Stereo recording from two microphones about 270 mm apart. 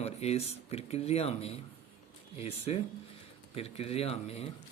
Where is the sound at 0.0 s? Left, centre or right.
Left.